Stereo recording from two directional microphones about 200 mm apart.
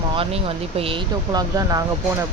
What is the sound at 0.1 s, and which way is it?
Speech, 30° right (ahead or behind).